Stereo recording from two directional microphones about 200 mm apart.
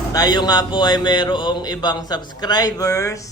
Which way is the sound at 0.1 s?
20° left (ahead or behind).